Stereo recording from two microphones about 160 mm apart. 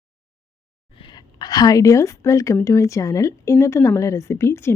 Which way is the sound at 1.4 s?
25° left (ahead or behind).